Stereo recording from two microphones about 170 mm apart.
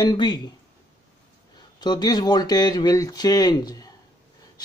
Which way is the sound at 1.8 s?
25° left (ahead or behind).